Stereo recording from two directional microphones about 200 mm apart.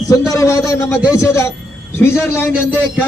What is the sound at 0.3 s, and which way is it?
A man's voice, 15° left (ahead or behind).